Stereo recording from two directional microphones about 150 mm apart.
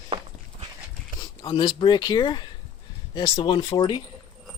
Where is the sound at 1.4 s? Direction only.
30° left (ahead or behind).